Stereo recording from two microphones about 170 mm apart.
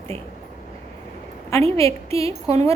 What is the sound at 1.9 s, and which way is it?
Speech, 35° right (ahead or behind).